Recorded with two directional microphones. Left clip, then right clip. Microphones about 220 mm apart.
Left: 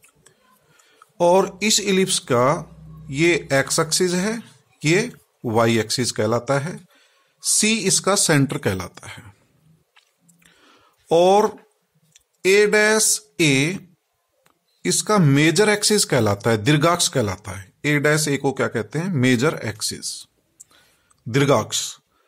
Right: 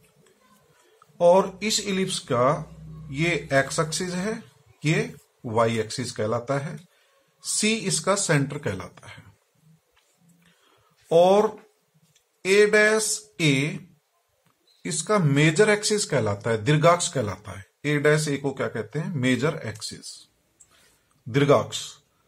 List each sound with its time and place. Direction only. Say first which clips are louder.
1.1 s speech: left 2 dB; 45° left (ahead or behind)
11.1 s speech: left 3 dB; 45° left (ahead or behind)
21.3 s speech: left 2 dB; 45° left (ahead or behind)